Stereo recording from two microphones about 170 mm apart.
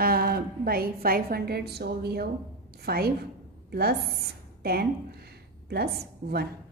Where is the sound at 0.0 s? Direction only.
60° right (ahead or behind).